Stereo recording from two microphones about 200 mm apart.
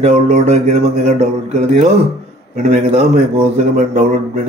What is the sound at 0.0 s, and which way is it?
A man's voice, 30° right (ahead or behind).